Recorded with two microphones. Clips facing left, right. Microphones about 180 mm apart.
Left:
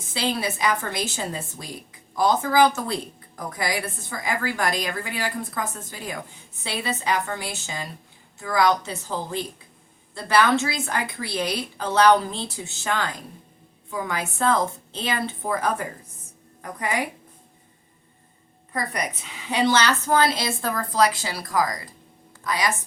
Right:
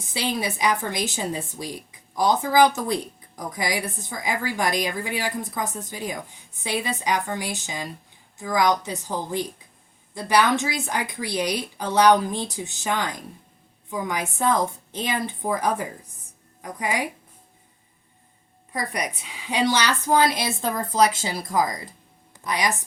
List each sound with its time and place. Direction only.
0.1 s a woman's voice: 15° right (ahead or behind)
18.7 s a woman's voice: 10° right (ahead or behind)